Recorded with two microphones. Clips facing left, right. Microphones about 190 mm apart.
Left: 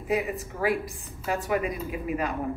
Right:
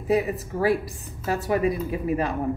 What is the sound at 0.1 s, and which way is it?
A woman's voice, 35° right (ahead or behind).